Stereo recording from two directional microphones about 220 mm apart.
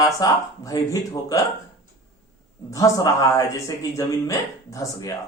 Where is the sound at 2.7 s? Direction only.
15° left (ahead or behind).